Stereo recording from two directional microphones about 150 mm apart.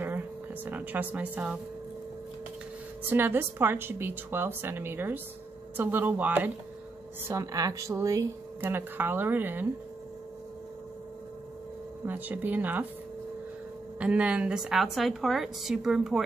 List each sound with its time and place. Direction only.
0.7 s speech: 10° right (ahead or behind)
3.1 s speech: 15° right (ahead or behind)
7.2 s speech: 20° right (ahead or behind)
12.1 s speech: 10° right (ahead or behind)
13.9 s a woman's voice: 10° right (ahead or behind)